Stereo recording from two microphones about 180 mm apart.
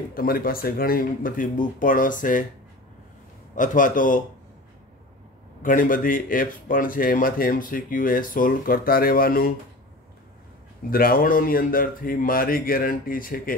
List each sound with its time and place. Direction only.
0.1 s speech: 55° left (ahead or behind)
3.5 s speech: 45° left (ahead or behind)
5.6 s speech: 50° left (ahead or behind)
10.9 s speech: 55° left (ahead or behind)